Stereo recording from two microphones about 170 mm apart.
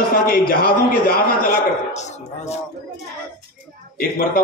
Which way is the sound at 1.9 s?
40° left (ahead or behind).